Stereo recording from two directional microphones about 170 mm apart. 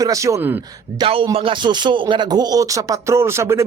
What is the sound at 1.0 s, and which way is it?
Speech, 30° right (ahead or behind).